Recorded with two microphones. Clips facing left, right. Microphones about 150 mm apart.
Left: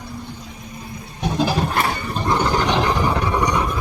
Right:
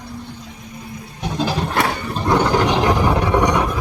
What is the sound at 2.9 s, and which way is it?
Mechanisms, 90° right.